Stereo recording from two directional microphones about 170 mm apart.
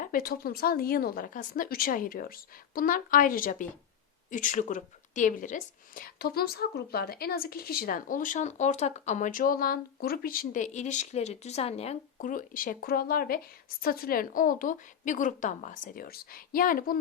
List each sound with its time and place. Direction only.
0.0 s a woman's voice: 55° left (ahead or behind); by 12.3 s 40° left (ahead or behind)
12.3 s speech: 55° left (ahead or behind)